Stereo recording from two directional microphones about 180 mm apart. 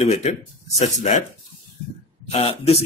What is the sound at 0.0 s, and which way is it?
Speech, 40° left (ahead or behind).